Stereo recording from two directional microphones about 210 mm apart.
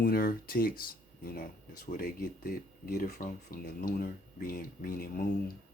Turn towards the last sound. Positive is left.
turn(degrees=45)  # may be behind; listen again after turning